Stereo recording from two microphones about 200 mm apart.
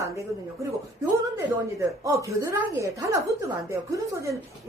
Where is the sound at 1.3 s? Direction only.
15° right (ahead or behind).